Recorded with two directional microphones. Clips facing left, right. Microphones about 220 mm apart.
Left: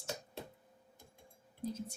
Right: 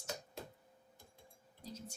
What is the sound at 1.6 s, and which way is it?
Speech, 55° left (ahead or behind).